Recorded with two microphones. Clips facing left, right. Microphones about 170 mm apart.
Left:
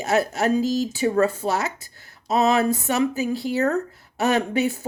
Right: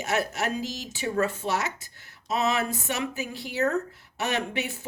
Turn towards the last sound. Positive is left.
turn(degrees=35)  # may be behind; listen again after turning